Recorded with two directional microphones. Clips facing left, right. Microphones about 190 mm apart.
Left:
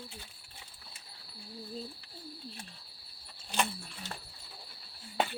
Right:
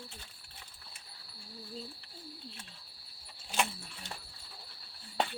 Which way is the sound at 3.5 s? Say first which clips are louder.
Left 1 dB; 5° right (ahead or behind).